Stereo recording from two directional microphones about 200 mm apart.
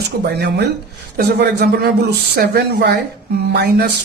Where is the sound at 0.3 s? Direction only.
55° right (ahead or behind).